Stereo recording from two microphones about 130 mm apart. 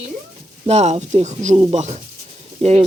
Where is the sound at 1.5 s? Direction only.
40° right (ahead or behind).